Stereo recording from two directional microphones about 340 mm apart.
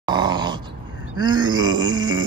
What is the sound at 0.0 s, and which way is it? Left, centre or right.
Dog, centre.